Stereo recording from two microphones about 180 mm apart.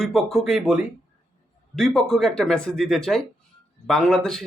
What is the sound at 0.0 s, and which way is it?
Speech, centre (ahead or behind).